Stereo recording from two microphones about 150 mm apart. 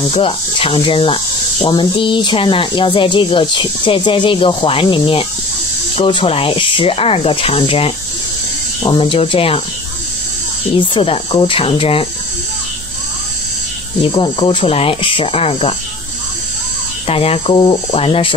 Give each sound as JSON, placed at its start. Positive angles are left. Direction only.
{"t": 0.1, "sound": "speech", "side_deg": 35}
{"t": 10.8, "sound": "speech", "side_deg": 35}
{"t": 14.0, "sound": "speech", "side_deg": 35}
{"t": 17.1, "sound": "speech", "side_deg": 40}